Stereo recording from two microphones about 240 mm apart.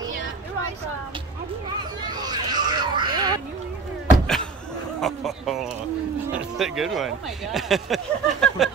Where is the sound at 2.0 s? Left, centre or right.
Centre.